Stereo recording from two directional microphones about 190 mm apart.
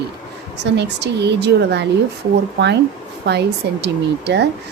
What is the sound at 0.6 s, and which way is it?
A woman's voice, 65° right (ahead or behind).